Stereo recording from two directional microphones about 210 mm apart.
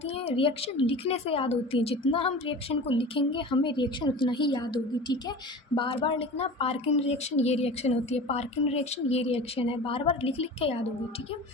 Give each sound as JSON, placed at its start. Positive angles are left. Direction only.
{"t": 0.0, "sound": "a woman's voice", "side_deg": 30}